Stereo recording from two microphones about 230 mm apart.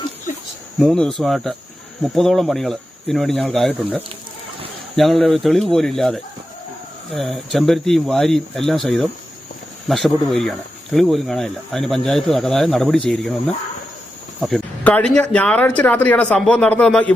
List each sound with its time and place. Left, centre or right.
0.8 s speech: centre
14.4 s speech: centre